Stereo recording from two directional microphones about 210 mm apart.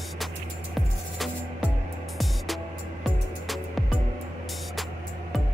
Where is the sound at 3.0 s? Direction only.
Centre (ahead or behind).